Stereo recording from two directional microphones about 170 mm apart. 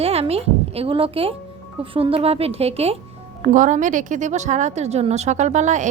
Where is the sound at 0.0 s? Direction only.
35° right (ahead or behind).